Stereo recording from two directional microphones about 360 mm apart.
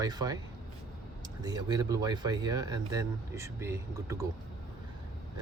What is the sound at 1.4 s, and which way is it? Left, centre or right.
Speech, centre.